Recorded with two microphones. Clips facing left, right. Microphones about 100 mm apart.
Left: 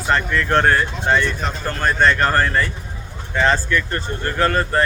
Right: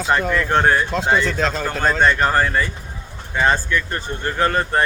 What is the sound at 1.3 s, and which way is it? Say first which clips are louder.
Speech: right 4 dB; 90° right.